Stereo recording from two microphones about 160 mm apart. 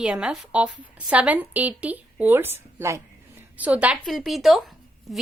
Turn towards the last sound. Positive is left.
turn(degrees=0)  # may be behind; listen again after turning